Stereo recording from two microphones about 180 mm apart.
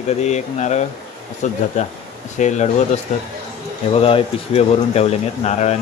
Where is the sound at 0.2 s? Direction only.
40° left (ahead or behind).